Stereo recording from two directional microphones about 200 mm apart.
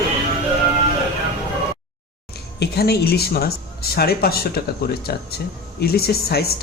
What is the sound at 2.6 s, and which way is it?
Speech, 55° left (ahead or behind).